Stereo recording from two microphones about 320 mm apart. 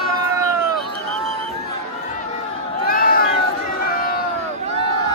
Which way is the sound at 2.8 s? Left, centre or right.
Left.